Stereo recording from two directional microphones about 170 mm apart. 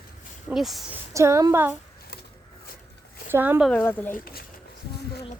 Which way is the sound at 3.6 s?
10° left (ahead or behind).